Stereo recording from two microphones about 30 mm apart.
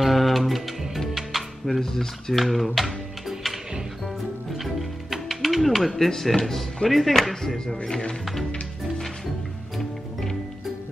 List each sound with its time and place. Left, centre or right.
0.0 s music: centre
1.8 s speech: centre
2.3 s music: centre
5.9 s speech: centre